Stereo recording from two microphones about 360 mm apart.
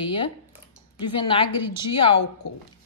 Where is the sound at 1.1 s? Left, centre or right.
Centre.